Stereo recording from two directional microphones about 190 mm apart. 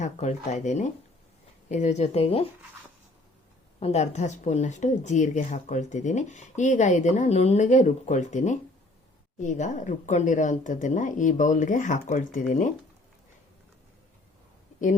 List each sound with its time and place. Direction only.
0.0 s speech: 35° left (ahead or behind)
3.8 s speech: 35° left (ahead or behind)